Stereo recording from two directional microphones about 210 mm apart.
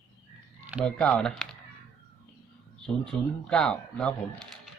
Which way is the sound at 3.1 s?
5° left (ahead or behind).